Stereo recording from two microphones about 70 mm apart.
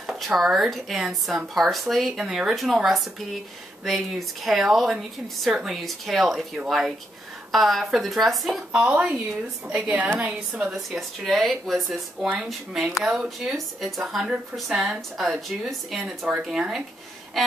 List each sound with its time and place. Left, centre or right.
0.0 s speech: centre
8.9 s a woman's voice: right
9.7 s a woman's voice: centre
10.5 s speech: centre